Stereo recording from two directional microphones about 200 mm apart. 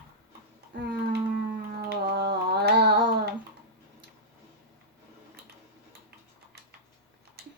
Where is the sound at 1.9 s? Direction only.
55° right (ahead or behind).